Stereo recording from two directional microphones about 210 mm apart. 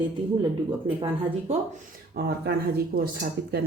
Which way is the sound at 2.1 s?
50° right (ahead or behind).